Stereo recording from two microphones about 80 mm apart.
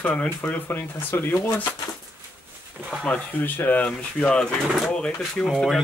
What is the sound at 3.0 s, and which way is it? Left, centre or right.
Speech, left.